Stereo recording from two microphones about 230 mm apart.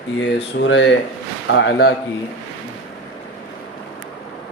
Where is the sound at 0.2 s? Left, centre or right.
Left.